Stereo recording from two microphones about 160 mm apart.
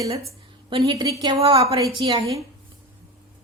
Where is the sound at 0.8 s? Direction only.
20° right (ahead or behind).